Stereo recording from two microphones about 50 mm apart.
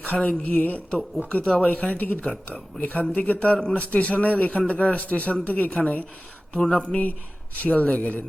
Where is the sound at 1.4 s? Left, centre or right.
Centre.